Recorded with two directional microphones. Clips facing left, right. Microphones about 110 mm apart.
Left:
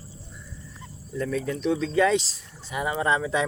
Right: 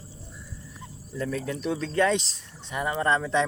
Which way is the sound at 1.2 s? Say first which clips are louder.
Left 2 dB; centre (ahead or behind).